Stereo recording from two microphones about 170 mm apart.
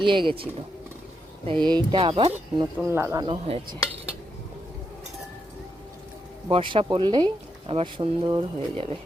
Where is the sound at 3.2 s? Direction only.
30° right (ahead or behind).